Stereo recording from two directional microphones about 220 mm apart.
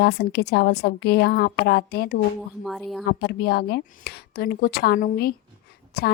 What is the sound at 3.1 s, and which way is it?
A woman's voice, 45° left (ahead or behind).